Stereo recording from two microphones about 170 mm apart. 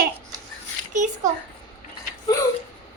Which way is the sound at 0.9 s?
45° right (ahead or behind).